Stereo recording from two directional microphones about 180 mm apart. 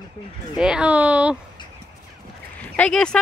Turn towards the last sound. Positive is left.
turn(degrees=5)  # may be behind; listen again after turning